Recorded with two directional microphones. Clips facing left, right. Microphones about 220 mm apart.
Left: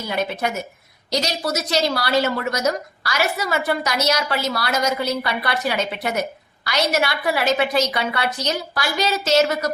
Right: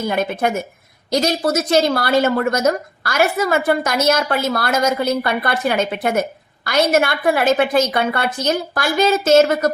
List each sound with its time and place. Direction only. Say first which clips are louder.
0.0 s a woman's voice: right 5 dB; 50° right (ahead or behind)